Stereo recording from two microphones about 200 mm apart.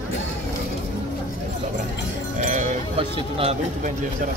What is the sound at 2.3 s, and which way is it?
Music, 40° right (ahead or behind).